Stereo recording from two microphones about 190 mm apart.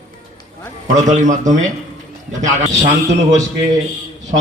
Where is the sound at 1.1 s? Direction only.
40° right (ahead or behind).